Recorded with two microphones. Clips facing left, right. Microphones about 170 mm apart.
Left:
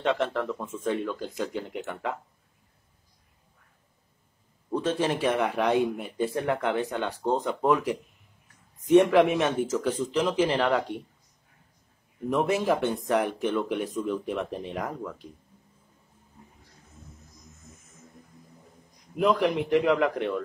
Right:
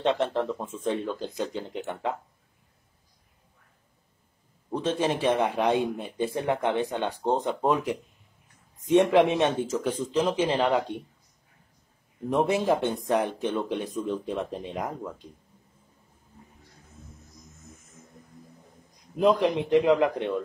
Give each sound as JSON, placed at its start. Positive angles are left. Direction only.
{"t": 0.0, "sound": "speech", "side_deg": -25}
{"t": 4.6, "sound": "speech", "side_deg": -20}
{"t": 12.3, "sound": "speech", "side_deg": -25}
{"t": 19.1, "sound": "speech", "side_deg": -25}